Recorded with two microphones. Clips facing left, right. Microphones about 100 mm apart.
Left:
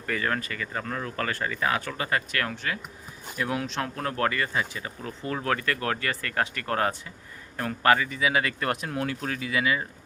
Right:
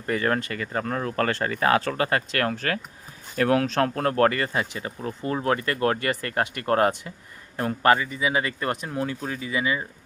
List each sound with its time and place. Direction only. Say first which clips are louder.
0.0 s speech: right 4 dB; 35° right (ahead or behind)
3.3 s speech: right 8 dB; 65° right (ahead or behind); by 5.3 s 40° right (ahead or behind)
5.3 s a man's voice: right 3 dB; 25° right (ahead or behind)
7.9 s speech: even; 20° right (ahead or behind)